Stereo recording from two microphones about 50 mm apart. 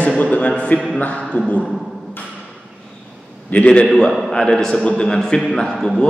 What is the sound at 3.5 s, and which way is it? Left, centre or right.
Speech, left.